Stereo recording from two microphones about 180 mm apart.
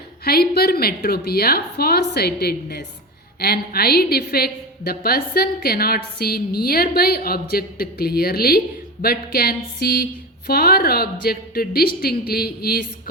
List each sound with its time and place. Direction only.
0.3 s a woman's voice: 60° left (ahead or behind)